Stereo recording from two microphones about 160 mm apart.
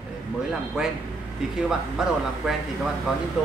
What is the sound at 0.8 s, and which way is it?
Speech, 5° right (ahead or behind).